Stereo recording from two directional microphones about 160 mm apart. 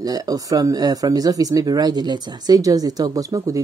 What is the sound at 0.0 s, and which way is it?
Speech, 25° right (ahead or behind).